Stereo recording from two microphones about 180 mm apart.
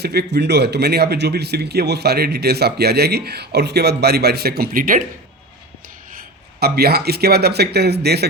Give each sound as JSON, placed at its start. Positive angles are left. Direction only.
{"t": 0.0, "sound": "speech", "side_deg": -65}
{"t": 6.6, "sound": "speech", "side_deg": -60}